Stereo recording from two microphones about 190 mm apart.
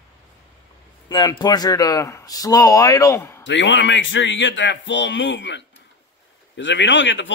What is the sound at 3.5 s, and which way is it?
A man's voice, 70° left (ahead or behind).